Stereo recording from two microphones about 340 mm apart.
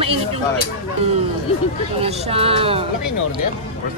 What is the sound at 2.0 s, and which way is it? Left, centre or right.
Speech, centre.